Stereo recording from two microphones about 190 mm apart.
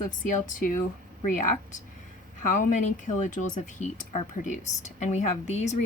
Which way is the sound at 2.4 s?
40° left (ahead or behind).